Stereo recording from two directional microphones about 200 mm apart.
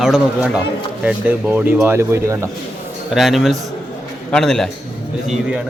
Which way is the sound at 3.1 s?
Centre (ahead or behind).